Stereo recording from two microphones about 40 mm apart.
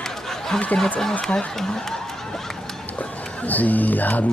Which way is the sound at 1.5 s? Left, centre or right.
Centre.